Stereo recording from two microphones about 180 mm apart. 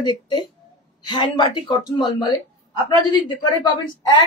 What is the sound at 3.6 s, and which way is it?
Speech, 25° left (ahead or behind).